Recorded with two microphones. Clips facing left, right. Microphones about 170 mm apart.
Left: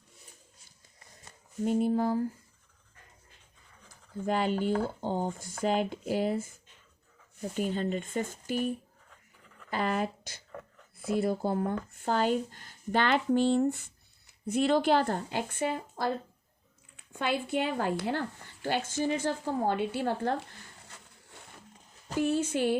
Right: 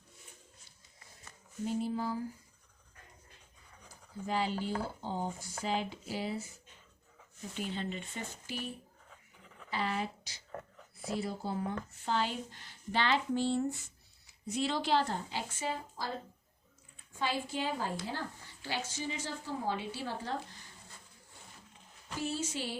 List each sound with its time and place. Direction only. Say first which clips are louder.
1.6 s speech: left 7 dB; 55° left (ahead or behind)
4.3 s speech: left 6 dB; 55° left (ahead or behind)
7.5 s speech: left 7 dB; 45° left (ahead or behind)
20.8 s a sound: left 3 dB; 75° left (ahead or behind)
22.2 s speech: left 9 dB; 60° left (ahead or behind)